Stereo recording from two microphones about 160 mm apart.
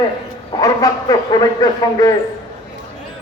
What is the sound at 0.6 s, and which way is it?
Speech, 20° left (ahead or behind).